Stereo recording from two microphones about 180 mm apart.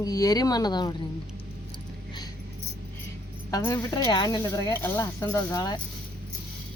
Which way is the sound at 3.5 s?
20° left (ahead or behind).